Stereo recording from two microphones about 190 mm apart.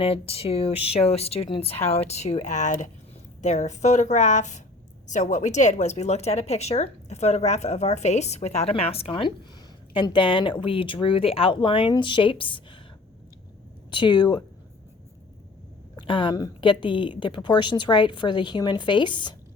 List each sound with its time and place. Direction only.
0.0 s speech: 30° left (ahead or behind)
13.9 s speech: 25° left (ahead or behind)
16.0 s speech: 25° left (ahead or behind)